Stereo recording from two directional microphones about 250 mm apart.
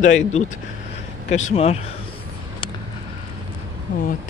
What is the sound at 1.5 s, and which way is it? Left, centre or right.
Speech, left.